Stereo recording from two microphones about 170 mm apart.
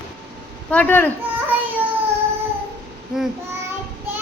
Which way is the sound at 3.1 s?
5° right (ahead or behind).